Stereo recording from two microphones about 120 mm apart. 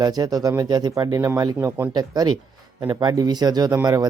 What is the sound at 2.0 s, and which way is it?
Speech, 35° right (ahead or behind).